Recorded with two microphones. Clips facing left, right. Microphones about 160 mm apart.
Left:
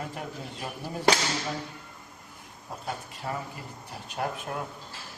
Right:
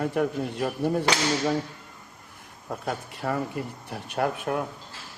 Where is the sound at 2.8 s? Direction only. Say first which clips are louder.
Right 5 dB; 65° right (ahead or behind).